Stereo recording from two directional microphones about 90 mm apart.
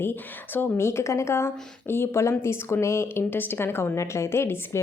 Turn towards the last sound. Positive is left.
turn(degrees=30)  # may be behind; listen again after turning